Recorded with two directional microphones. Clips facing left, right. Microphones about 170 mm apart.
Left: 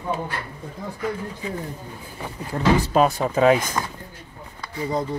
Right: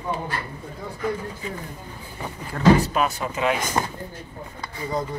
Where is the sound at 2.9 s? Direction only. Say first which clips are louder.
Left 5 dB; 35° left (ahead or behind).